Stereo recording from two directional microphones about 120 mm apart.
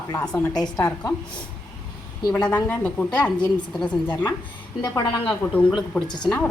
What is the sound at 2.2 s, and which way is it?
Speech, 35° left (ahead or behind).